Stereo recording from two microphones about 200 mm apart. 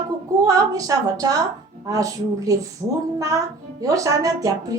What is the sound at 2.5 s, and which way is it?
Speech, 15° right (ahead or behind).